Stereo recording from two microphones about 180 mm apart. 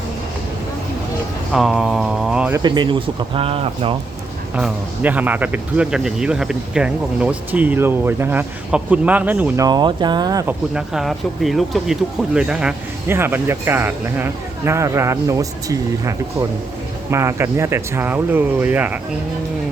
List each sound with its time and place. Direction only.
1.5 s speech: centre (ahead or behind)
2.6 s speech: 25° right (ahead or behind)
4.5 s speech: 5° right (ahead or behind)
9.6 s speech: 25° right (ahead or behind)
10.4 s speech: 5° right (ahead or behind)